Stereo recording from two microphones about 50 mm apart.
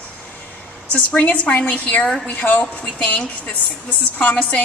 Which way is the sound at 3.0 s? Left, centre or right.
Left.